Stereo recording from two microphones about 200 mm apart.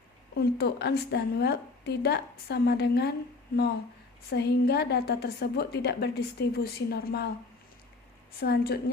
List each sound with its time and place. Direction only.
0.3 s a woman's voice: 55° left (ahead or behind)
8.4 s a woman's voice: 50° left (ahead or behind)